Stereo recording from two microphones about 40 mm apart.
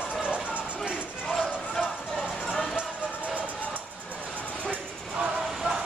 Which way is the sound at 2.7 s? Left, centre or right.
Right.